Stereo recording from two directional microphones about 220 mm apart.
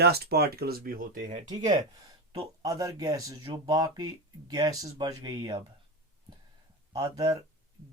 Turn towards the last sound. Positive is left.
turn(degrees=-15)  # may be behind; listen again after turning